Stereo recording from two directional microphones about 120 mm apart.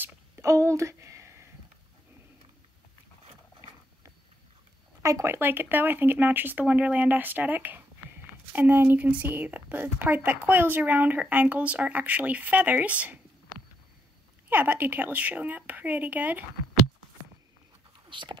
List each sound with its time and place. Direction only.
0.0 s a sound: 25° right (ahead or behind)
5.0 s speech: 25° right (ahead or behind)
14.5 s speech: 15° right (ahead or behind)
18.1 s speech: 40° right (ahead or behind)